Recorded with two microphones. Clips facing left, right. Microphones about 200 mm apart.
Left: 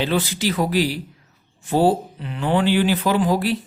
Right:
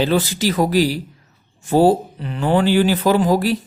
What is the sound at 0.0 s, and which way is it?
Speech, 40° right (ahead or behind).